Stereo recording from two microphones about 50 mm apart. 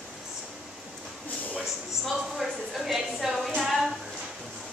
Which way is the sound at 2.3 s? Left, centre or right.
Centre.